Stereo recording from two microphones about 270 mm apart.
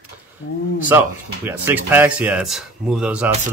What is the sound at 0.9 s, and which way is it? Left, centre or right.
Speech, centre.